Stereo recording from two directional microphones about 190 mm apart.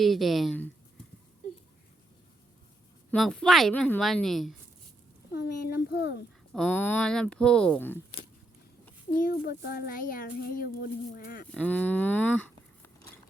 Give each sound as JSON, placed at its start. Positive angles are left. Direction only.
{"t": 0.0, "sound": "a woman's voice", "side_deg": 0}
{"t": 3.1, "sound": "a woman's voice", "side_deg": 0}
{"t": 5.3, "sound": "speech", "side_deg": 55}
{"t": 6.5, "sound": "a woman's voice", "side_deg": 5}
{"t": 9.1, "sound": "a child's voice", "side_deg": 50}
{"t": 11.5, "sound": "speech", "side_deg": 5}